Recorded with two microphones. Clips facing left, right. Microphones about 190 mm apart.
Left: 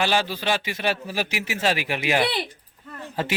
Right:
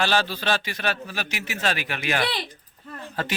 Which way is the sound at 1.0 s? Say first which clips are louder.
Left 5 dB; 10° left (ahead or behind).